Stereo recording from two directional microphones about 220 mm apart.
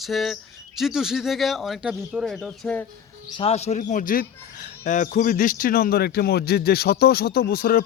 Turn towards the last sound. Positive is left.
turn(degrees=45)  # may be behind; listen again after turning